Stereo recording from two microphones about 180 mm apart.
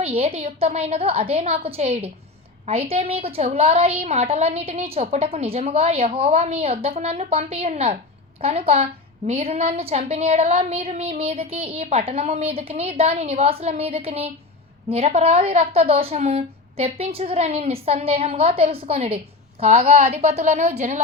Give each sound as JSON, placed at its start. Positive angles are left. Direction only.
{"t": 0.0, "sound": "a woman's voice", "side_deg": -35}